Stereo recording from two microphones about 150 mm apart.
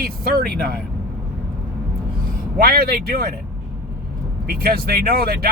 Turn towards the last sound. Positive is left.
turn(degrees=-90)